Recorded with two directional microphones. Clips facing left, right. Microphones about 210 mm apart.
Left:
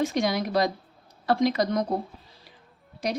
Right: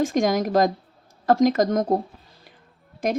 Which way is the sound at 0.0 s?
45° right (ahead or behind).